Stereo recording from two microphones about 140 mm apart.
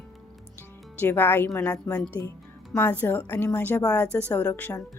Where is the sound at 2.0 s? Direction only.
10° left (ahead or behind).